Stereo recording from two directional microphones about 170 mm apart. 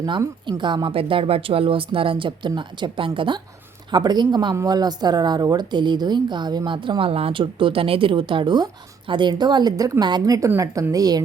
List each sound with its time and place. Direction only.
0.0 s a woman's voice: 25° right (ahead or behind)